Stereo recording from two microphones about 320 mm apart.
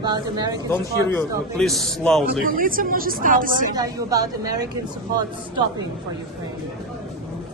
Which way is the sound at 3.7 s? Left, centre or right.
Centre.